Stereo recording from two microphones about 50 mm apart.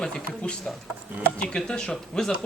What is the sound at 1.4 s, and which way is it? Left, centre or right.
Speech, centre.